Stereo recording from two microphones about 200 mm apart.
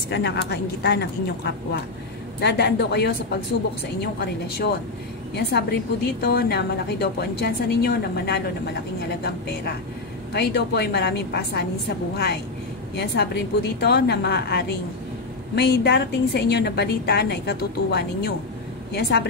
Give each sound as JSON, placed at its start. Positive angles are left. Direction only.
{"t": 0.1, "sound": "a woman's voice", "side_deg": 55}
{"t": 10.3, "sound": "a woman's voice", "side_deg": 55}
{"t": 12.9, "sound": "a woman's voice", "side_deg": 55}